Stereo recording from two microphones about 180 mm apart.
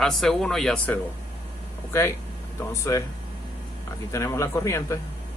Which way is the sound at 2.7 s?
15° left (ahead or behind).